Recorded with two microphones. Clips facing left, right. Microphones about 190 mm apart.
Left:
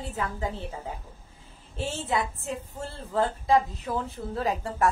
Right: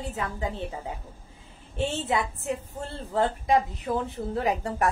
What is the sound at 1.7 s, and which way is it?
Speech, 20° right (ahead or behind).